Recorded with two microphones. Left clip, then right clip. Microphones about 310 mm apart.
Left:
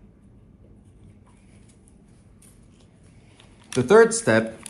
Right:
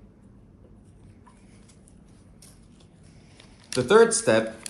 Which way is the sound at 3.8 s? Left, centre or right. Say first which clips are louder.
Left 2 dB; left.